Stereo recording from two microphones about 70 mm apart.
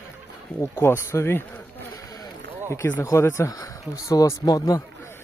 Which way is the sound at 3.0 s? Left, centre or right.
Left.